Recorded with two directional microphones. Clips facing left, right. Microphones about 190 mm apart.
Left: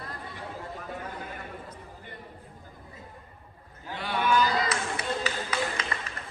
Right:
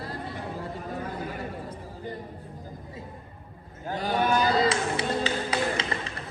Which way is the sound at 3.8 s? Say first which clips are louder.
Right 3 dB; 40° right (ahead or behind).